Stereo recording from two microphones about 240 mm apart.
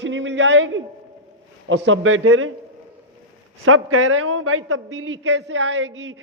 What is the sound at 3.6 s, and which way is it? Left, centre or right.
A man's voice, right.